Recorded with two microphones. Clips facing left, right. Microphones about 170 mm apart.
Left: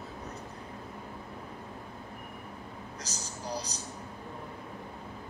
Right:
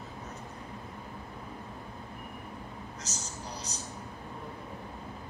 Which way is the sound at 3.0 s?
35° left (ahead or behind).